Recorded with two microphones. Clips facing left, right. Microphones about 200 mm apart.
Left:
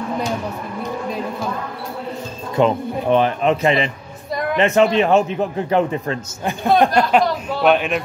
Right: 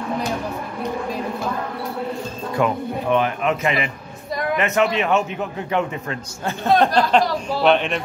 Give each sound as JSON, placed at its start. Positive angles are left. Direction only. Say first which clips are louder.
{"t": 2.5, "sound": "speech", "louder": "left 4 dB", "side_deg": 30}
{"t": 6.8, "sound": "speech", "louder": "left 3 dB", "side_deg": 10}